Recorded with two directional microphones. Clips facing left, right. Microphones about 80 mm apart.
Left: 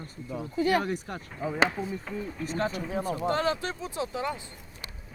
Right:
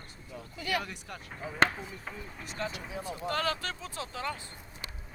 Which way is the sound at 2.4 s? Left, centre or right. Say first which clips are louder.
Left 7 dB; left.